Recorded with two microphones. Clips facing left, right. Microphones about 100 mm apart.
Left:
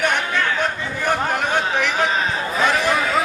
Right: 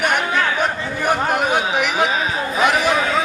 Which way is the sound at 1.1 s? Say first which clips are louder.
Right 2 dB; 15° right (ahead or behind).